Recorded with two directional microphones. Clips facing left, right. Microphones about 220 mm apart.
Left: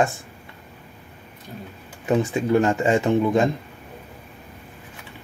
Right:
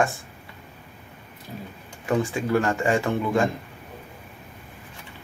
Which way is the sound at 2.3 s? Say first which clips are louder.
Left 4 dB; 20° left (ahead or behind).